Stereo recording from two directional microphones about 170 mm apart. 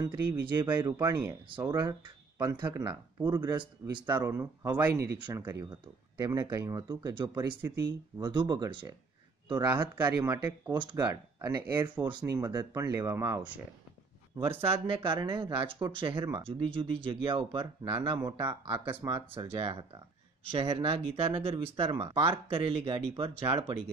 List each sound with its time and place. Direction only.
0.0 s speech: 20° right (ahead or behind)
4.0 s speech: 15° right (ahead or behind)
10.2 s speech: 15° right (ahead or behind)
10.7 s speech: 25° right (ahead or behind)
14.7 s speech: 30° right (ahead or behind)
18.4 s speech: 15° right (ahead or behind)
19.3 s speech: 35° right (ahead or behind)